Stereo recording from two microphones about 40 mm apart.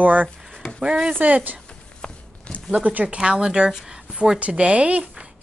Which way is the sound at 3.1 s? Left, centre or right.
Right.